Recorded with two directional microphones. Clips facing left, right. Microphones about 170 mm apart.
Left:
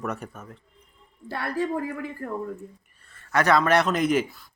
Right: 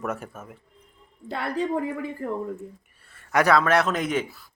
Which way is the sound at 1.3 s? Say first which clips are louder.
Right 1 dB; 20° right (ahead or behind).